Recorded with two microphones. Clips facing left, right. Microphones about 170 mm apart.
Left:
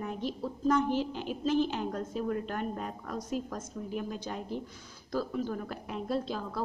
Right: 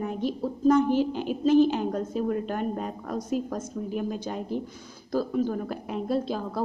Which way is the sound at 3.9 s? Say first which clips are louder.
Right 5 dB; 15° right (ahead or behind).